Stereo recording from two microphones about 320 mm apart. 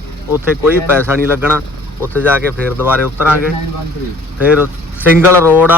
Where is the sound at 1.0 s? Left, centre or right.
Centre.